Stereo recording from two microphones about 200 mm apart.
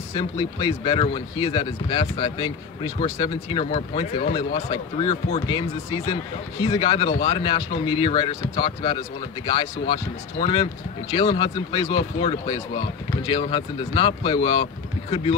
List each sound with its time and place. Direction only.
0.2 s speech: 25° left (ahead or behind)